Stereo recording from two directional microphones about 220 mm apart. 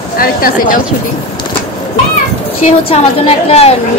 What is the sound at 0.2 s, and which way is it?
Speech, 40° left (ahead or behind).